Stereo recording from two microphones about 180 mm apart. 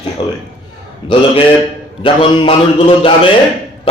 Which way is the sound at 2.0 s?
25° left (ahead or behind).